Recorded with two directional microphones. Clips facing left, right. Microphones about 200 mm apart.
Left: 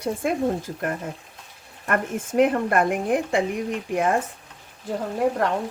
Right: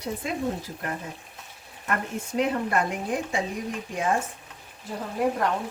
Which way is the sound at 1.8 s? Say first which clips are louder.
Left 5 dB; 50° left (ahead or behind).